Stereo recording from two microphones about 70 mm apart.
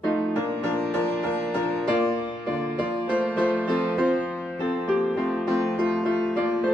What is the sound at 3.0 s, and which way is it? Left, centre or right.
Music, centre.